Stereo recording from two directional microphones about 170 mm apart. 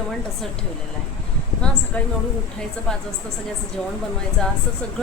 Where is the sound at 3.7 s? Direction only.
5° left (ahead or behind).